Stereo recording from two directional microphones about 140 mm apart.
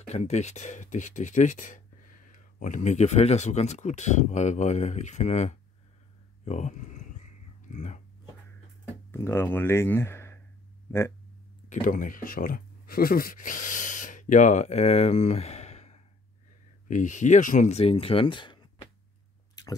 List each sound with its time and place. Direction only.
0.0 s speech: 55° left (ahead or behind)
6.4 s a sound: 55° left (ahead or behind)
7.7 s speech: 60° left (ahead or behind)
9.1 s speech: 15° left (ahead or behind)
11.7 s speech: 70° left (ahead or behind); by 16.0 s 50° left (ahead or behind)
16.8 s speech: 65° left (ahead or behind); by 18.9 s 35° left (ahead or behind)
19.6 s squish: 30° left (ahead or behind)